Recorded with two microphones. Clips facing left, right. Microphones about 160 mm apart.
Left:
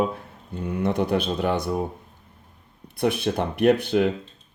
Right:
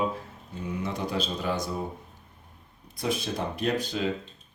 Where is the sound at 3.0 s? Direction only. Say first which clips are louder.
Left 6 dB; 60° left (ahead or behind).